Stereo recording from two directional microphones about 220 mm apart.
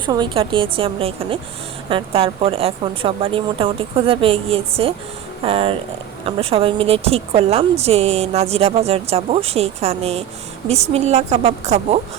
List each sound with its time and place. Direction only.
0.0 s a woman's voice: 20° right (ahead or behind)